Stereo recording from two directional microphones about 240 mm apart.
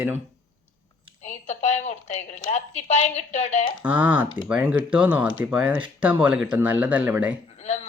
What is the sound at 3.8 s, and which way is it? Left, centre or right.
Speech, centre.